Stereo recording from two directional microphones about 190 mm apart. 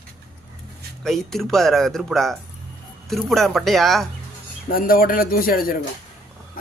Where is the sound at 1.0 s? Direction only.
Centre (ahead or behind).